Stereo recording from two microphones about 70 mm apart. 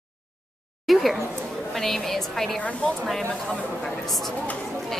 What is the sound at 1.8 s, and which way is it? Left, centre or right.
Speech, centre.